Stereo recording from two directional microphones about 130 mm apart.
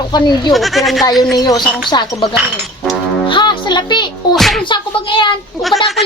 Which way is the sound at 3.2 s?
35° left (ahead or behind).